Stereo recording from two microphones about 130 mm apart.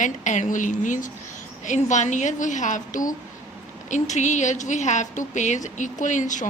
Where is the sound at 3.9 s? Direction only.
65° left (ahead or behind).